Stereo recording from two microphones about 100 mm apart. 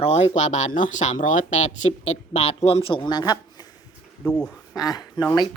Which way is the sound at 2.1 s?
90° left.